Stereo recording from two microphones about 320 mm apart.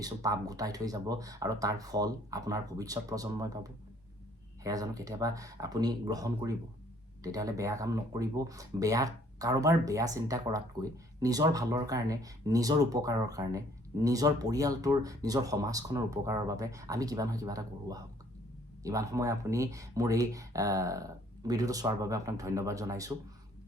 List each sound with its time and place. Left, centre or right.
0.0 s speech: centre